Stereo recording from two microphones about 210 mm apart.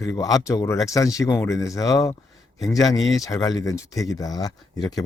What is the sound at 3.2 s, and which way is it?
A man's voice, 15° left (ahead or behind).